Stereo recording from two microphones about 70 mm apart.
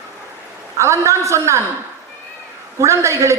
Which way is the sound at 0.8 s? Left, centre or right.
Right.